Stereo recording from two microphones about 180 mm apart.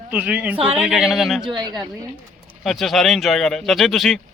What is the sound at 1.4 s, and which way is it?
Speech, 25° right (ahead or behind).